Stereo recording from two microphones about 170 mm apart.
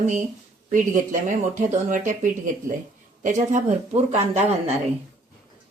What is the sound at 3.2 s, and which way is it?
Speech, 45° right (ahead or behind).